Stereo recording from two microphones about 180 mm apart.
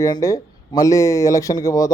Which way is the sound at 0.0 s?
20° left (ahead or behind).